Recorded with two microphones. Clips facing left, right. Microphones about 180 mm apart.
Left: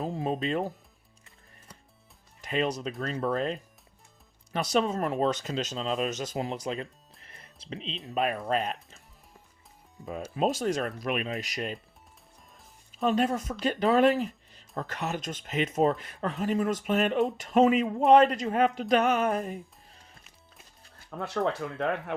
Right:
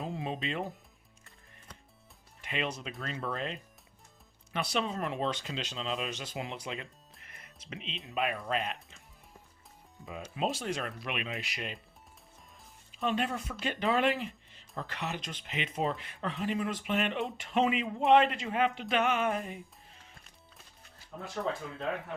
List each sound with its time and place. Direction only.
0.0 s speech: 40° left (ahead or behind)
2.4 s speech: 40° left (ahead or behind)
10.3 s speech: 45° left (ahead or behind)
12.9 s speech: 40° left (ahead or behind)
21.2 s speech: 70° left (ahead or behind)